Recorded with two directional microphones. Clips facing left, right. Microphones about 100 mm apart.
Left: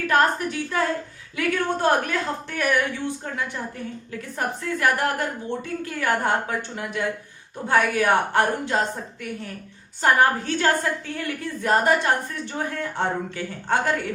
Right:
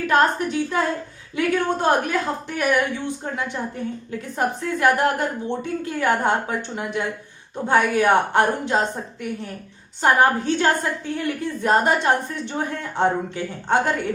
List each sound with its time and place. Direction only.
0.1 s a woman's voice: 20° right (ahead or behind)
10.0 s a woman's voice: 20° right (ahead or behind)